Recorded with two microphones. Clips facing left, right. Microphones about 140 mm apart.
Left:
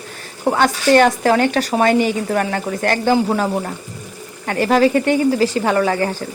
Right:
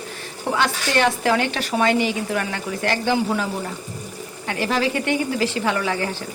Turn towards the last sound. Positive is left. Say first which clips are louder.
# left 6 dB
turn(degrees=45)  # may be behind; listen again after turning